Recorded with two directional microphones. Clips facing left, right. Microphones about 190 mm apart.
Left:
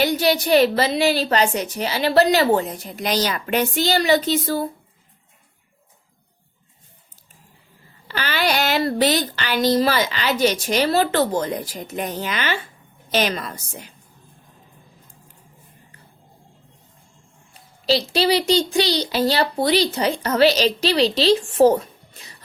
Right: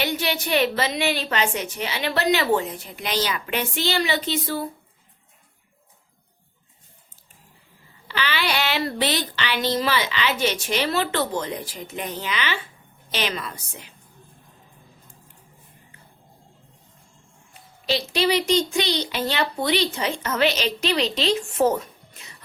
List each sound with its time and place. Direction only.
0.0 s a woman's voice: 40° left (ahead or behind)
8.0 s speech: 45° left (ahead or behind)
17.8 s a woman's voice: 35° left (ahead or behind)